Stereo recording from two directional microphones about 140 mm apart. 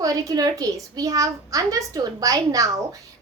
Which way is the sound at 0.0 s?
25° right (ahead or behind).